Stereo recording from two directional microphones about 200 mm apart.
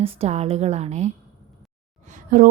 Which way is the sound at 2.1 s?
40° right (ahead or behind).